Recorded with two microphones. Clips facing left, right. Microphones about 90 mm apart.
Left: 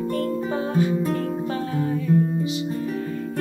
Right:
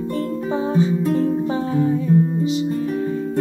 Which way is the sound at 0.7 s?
20° right (ahead or behind).